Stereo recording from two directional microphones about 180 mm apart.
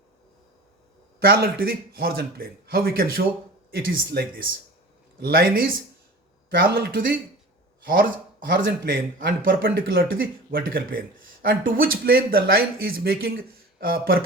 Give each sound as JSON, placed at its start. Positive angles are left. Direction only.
{"t": 1.2, "sound": "speech", "side_deg": -60}
{"t": 8.4, "sound": "a man's voice", "side_deg": -55}